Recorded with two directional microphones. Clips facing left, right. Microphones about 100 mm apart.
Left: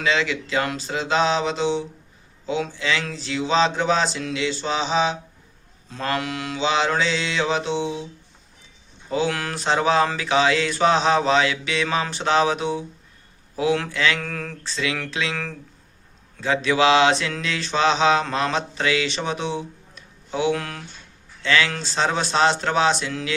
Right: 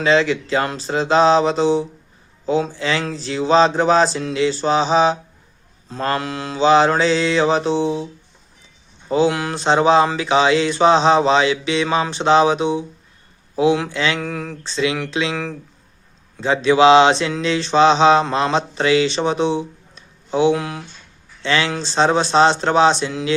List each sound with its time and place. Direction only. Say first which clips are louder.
0.0 s speech: right 7 dB; 35° right (ahead or behind)
9.0 s mantra: right 6 dB; 25° right (ahead or behind)
14.2 s a sound: right 5 dB; 15° right (ahead or behind)
16.4 s mantra: right 6 dB; 25° right (ahead or behind)
20.6 s a sound: right 5 dB; 15° right (ahead or behind)
21.4 s mantra: right 2 dB; 30° right (ahead or behind)